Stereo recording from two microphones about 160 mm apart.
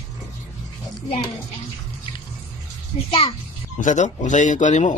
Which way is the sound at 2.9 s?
40° left (ahead or behind).